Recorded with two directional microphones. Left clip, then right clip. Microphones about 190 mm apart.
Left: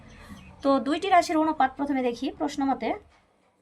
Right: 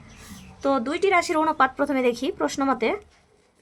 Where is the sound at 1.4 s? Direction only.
30° right (ahead or behind).